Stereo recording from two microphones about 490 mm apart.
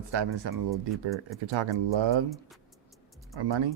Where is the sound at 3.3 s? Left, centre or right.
Right.